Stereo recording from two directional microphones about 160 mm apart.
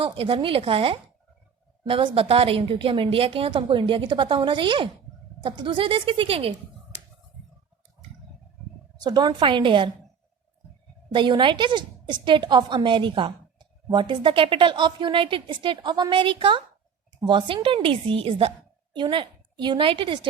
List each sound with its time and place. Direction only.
0.0 s a woman's voice: 35° right (ahead or behind)
9.0 s a woman's voice: 25° right (ahead or behind)
11.1 s a woman's voice: 30° right (ahead or behind)